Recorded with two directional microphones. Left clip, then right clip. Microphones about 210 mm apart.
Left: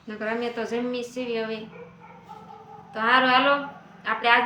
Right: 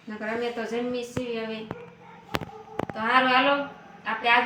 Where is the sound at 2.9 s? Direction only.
25° left (ahead or behind).